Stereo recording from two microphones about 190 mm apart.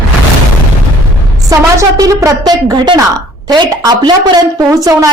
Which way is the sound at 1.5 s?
20° right (ahead or behind).